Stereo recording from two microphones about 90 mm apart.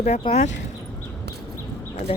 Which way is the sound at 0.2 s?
75° left (ahead or behind).